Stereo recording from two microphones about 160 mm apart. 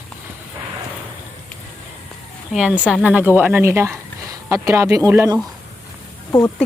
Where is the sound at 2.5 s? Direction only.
5° right (ahead or behind).